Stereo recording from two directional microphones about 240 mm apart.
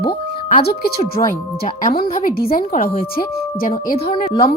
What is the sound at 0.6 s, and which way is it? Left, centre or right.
A woman's voice, left.